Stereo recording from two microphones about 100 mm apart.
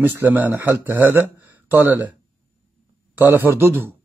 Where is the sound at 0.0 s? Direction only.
20° right (ahead or behind).